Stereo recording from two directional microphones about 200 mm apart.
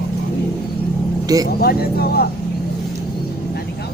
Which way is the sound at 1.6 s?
50° left (ahead or behind).